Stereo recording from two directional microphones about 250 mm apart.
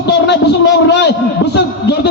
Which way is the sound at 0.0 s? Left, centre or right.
Left.